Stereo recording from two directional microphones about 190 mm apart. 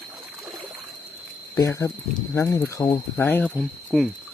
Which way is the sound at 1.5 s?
15° left (ahead or behind).